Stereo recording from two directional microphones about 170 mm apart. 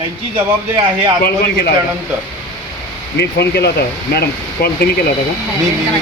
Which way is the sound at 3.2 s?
75° left (ahead or behind).